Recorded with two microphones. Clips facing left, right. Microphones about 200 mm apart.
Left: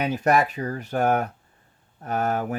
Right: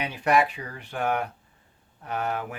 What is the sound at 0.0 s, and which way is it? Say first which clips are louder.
Speech: left 2 dB; 40° left (ahead or behind).